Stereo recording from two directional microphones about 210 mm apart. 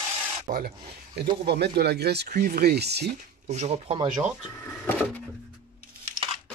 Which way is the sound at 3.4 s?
30° right (ahead or behind).